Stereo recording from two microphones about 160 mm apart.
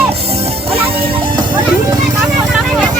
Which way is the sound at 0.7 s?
35° right (ahead or behind).